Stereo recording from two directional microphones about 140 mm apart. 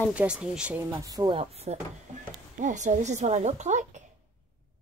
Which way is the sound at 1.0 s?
30° right (ahead or behind).